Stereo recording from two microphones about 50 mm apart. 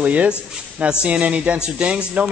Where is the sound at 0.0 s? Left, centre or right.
Right.